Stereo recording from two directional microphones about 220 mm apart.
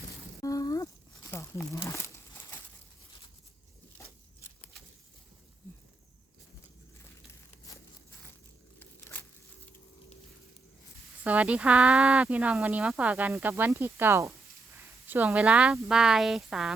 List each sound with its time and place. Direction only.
0.4 s crumpling: 15° left (ahead or behind)
8.8 s a sound: 10° left (ahead or behind)
11.2 s speech: 5° right (ahead or behind)